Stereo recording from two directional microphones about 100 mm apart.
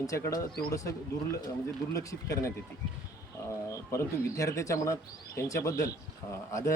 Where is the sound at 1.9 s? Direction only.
35° left (ahead or behind).